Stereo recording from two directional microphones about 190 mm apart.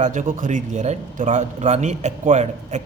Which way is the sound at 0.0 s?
40° right (ahead or behind).